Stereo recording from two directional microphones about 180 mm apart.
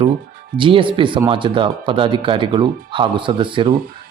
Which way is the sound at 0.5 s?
30° right (ahead or behind).